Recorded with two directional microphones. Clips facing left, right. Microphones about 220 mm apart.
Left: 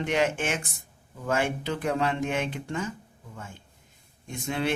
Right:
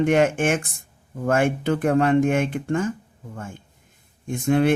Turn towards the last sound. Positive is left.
turn(degrees=-50)  # may be behind; listen again after turning